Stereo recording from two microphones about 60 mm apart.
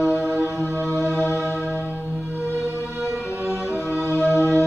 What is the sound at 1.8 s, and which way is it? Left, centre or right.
Music, left.